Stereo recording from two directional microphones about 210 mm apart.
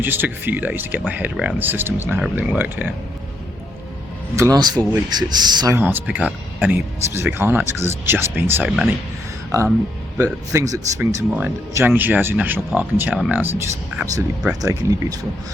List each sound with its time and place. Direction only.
0.0 s speech: 10° right (ahead or behind)
4.4 s speech: 15° right (ahead or behind)
10.2 s speech: 15° right (ahead or behind)